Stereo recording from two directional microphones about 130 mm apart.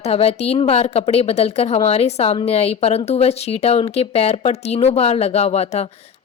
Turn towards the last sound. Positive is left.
turn(degrees=55)  # may be behind; listen again after turning